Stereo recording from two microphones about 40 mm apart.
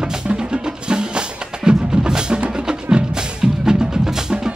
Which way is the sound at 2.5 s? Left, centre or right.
Right.